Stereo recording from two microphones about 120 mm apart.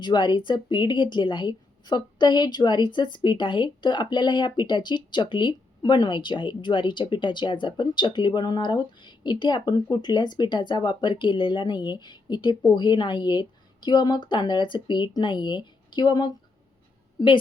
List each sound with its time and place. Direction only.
0.0 s a woman's voice: 40° left (ahead or behind)